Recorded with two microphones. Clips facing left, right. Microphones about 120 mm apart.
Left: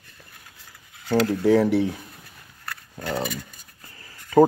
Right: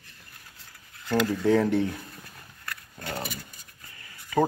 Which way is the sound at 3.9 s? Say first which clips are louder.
Left 8 dB; 35° left (ahead or behind).